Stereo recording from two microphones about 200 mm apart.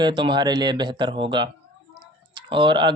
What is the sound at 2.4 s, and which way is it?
Speech, 25° right (ahead or behind).